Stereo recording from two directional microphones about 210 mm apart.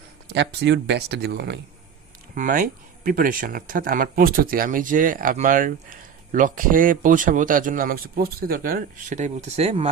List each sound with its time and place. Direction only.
0.3 s speech: 55° right (ahead or behind)
2.3 s speech: 40° right (ahead or behind)